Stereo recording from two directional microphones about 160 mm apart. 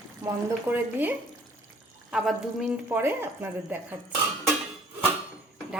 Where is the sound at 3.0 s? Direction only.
15° right (ahead or behind).